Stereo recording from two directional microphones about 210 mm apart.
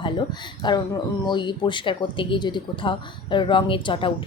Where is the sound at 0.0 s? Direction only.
20° left (ahead or behind).